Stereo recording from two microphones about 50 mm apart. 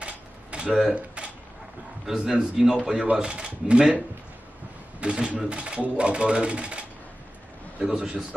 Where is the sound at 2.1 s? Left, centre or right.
Centre.